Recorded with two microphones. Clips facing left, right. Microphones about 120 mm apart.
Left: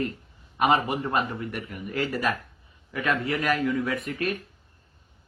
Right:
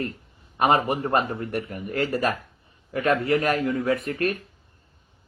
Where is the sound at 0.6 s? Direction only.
40° right (ahead or behind).